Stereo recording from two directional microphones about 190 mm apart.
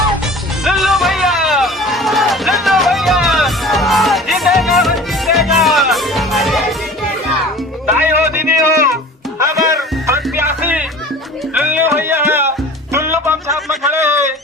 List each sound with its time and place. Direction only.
0.6 s music: centre (ahead or behind)
7.9 s music: 10° right (ahead or behind)